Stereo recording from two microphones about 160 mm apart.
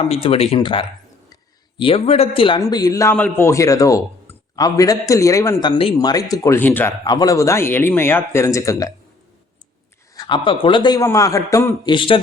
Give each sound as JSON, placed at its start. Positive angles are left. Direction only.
{"t": 0.0, "sound": "speech", "side_deg": 35}
{"t": 2.6, "sound": "a man's voice", "side_deg": 25}
{"t": 7.0, "sound": "speech", "side_deg": 25}
{"t": 10.2, "sound": "a man's voice", "side_deg": 30}
{"t": 11.9, "sound": "speech", "side_deg": 35}